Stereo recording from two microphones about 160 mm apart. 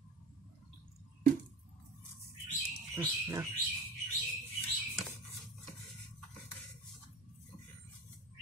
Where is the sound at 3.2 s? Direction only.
20° right (ahead or behind).